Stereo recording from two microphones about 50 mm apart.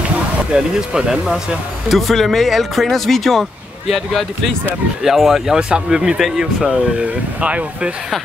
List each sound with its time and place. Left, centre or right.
0.5 s speech: centre
2.0 s speech: centre
5.6 s speech: centre
7.0 s speech: right